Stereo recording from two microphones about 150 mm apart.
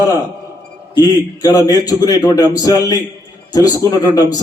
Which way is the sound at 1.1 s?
25° left (ahead or behind).